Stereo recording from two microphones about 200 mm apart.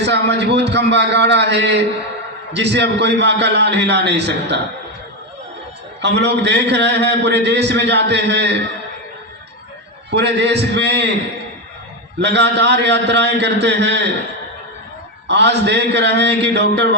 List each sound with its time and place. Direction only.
0.0 s a man's voice: 60° right (ahead or behind)
6.0 s a man's voice: 60° right (ahead or behind)
10.1 s a man's voice: 60° right (ahead or behind)
12.2 s a man's voice: 60° right (ahead or behind)
15.3 s a man's voice: 60° right (ahead or behind)